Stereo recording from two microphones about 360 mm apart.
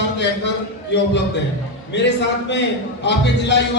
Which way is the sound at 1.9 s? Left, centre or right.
Left.